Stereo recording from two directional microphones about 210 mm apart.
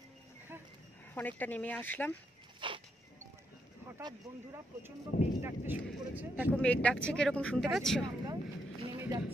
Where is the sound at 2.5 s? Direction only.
25° right (ahead or behind).